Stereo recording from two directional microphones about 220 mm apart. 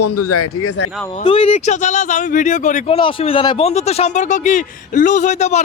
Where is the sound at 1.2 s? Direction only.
25° left (ahead or behind).